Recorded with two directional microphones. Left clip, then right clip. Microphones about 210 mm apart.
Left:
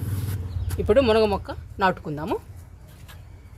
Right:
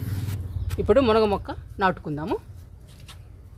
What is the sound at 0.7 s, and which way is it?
Speech, 40° right (ahead or behind).